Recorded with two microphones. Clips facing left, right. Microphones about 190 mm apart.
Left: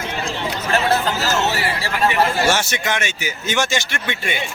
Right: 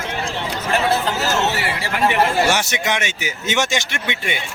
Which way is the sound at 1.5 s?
20° right (ahead or behind).